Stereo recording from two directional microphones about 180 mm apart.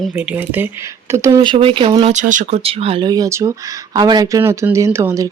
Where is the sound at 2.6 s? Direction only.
35° right (ahead or behind).